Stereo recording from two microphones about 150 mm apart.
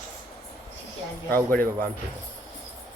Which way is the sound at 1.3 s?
15° left (ahead or behind).